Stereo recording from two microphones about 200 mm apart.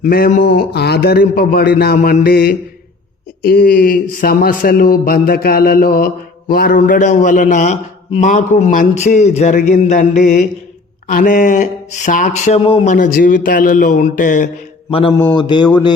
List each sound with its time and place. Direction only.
0.0 s a man's voice: 45° left (ahead or behind)
14.8 s mantra: 25° left (ahead or behind)
15.3 s a sound: 20° left (ahead or behind)